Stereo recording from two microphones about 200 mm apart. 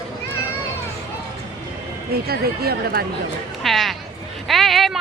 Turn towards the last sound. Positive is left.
turn(degrees=0)  # may be behind; listen again after turning